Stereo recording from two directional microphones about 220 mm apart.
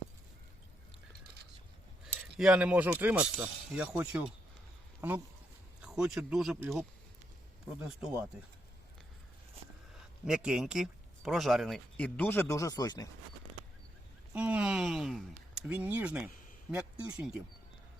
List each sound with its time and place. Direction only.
2.4 s speech: 5° right (ahead or behind)
7.8 s speech: 5° right (ahead or behind)
10.2 s speech: 5° right (ahead or behind); by 13.1 s 15° left (ahead or behind)
14.3 s speech: 5° right (ahead or behind)